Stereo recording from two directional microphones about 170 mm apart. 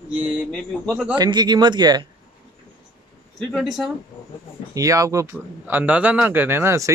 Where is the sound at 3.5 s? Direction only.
Centre (ahead or behind).